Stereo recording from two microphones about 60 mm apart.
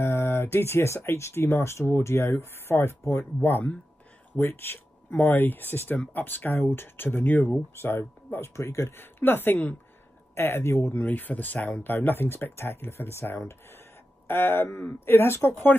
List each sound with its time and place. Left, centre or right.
0.0 s speech: left
3.4 s speech: left
8.5 s speech: left
11.0 s speech: left